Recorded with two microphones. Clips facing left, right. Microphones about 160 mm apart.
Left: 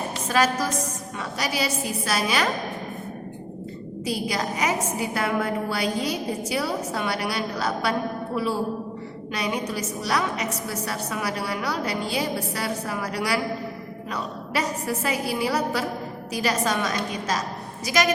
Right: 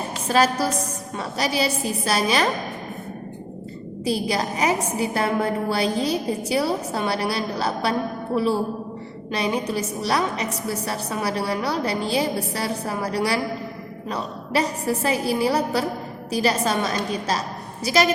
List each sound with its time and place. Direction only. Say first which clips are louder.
0.3 s a woman's voice: right 3 dB; 30° right (ahead or behind)
4.0 s a woman's voice: right 4 dB; 30° right (ahead or behind)
9.3 s a woman's voice: right 4 dB; 30° right (ahead or behind)